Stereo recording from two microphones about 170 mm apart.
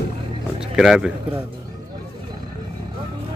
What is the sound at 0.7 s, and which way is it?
Speech, centre (ahead or behind).